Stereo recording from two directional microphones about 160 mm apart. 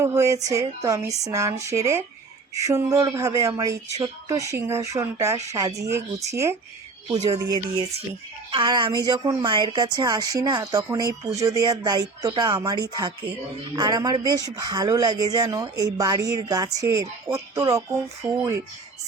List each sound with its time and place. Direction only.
0.0 s speech: 20° right (ahead or behind)
8.5 s speech: 30° right (ahead or behind)